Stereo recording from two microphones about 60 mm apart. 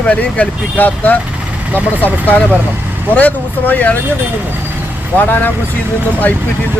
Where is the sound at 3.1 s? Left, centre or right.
Left.